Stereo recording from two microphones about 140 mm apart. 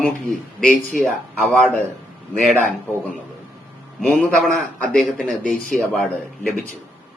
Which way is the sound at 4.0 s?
5° left (ahead or behind).